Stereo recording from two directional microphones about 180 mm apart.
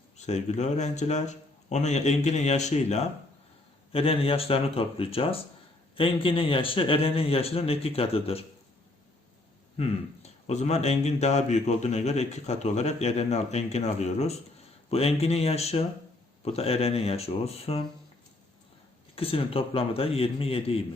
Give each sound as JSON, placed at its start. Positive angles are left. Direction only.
{"t": 0.3, "sound": "speech", "side_deg": 40}
{"t": 9.8, "sound": "speech", "side_deg": 35}
{"t": 19.1, "sound": "speech", "side_deg": 30}